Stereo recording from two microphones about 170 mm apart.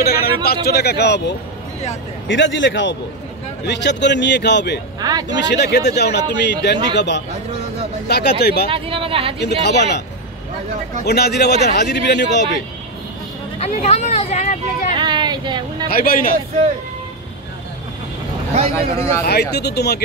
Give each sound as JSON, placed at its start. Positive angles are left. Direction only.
{"t": 0.0, "sound": "a man's voice", "side_deg": 65}
{"t": 8.1, "sound": "speech", "side_deg": 70}
{"t": 8.6, "sound": "speech", "side_deg": -30}
{"t": 9.4, "sound": "a man's voice", "side_deg": 85}
{"t": 11.1, "sound": "a man's voice", "side_deg": 75}
{"t": 13.6, "sound": "speech", "side_deg": 40}
{"t": 15.0, "sound": "vehicle", "side_deg": -25}
{"t": 15.9, "sound": "speech", "side_deg": 60}
{"t": 18.5, "sound": "speech", "side_deg": -40}
{"t": 19.2, "sound": "speech", "side_deg": 75}